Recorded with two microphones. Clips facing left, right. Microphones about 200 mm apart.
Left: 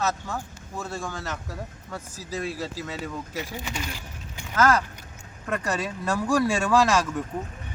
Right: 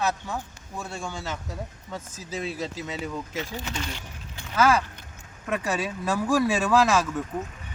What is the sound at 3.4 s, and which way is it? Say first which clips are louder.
Speech: left 1 dB; 10° left (ahead or behind).